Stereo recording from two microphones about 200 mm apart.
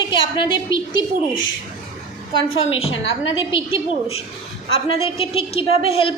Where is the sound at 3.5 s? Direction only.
25° left (ahead or behind).